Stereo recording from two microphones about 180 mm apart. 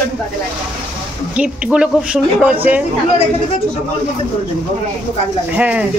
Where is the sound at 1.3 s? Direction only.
5° right (ahead or behind).